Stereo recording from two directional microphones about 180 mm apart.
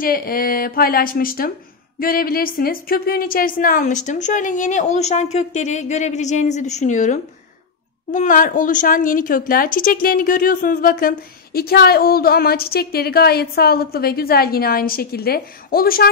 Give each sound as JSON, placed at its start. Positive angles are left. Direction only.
{"t": 0.0, "sound": "speech", "side_deg": 55}